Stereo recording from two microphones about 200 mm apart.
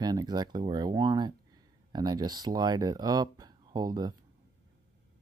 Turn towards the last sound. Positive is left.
turn(degrees=-20)  # may be behind; listen again after turning